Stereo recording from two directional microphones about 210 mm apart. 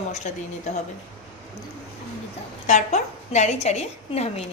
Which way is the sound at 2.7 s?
35° left (ahead or behind).